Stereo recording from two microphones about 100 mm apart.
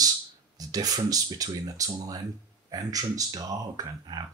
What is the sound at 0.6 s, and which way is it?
Speech, 40° right (ahead or behind).